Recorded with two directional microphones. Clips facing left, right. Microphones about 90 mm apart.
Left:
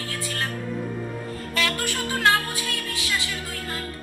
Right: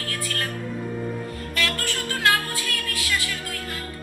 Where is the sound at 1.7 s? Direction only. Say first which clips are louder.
Left 1 dB; 15° left (ahead or behind).